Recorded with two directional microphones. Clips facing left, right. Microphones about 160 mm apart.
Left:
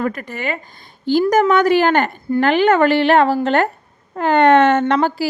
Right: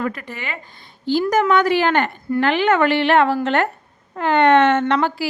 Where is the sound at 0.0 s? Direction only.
45° left (ahead or behind).